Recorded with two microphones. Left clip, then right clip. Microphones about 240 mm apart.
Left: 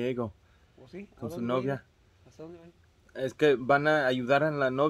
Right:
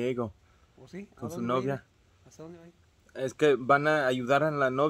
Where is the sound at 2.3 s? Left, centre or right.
Right.